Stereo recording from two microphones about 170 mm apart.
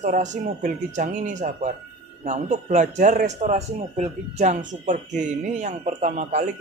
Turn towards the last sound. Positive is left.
turn(degrees=-45)  # may be behind; listen again after turning